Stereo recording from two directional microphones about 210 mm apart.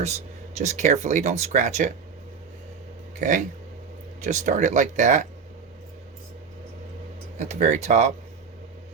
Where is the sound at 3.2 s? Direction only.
35° right (ahead or behind).